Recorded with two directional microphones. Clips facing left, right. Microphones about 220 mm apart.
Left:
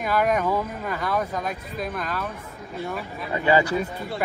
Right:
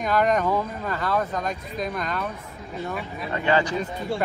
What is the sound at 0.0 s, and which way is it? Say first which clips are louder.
Speech: right 1 dB; 5° left (ahead or behind).